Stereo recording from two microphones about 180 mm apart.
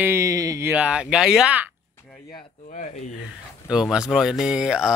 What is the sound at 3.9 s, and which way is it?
Speech, 5° right (ahead or behind).